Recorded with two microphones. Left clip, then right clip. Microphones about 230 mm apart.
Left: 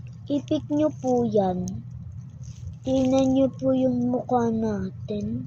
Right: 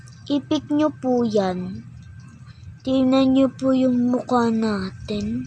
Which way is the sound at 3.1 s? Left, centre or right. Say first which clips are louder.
Right 4 dB; right.